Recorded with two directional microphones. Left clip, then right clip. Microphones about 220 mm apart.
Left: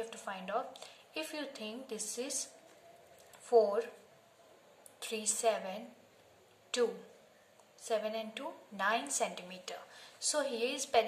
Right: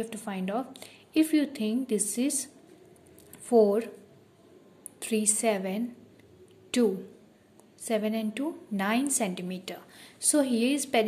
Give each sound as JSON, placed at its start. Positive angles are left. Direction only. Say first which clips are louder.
{"t": 0.1, "sound": "a woman's voice", "louder": "right 5 dB", "side_deg": -35}
{"t": 5.0, "sound": "a woman's voice", "louder": "right 6 dB", "side_deg": -35}
{"t": 7.8, "sound": "a woman's voice", "louder": "right 6 dB", "side_deg": -35}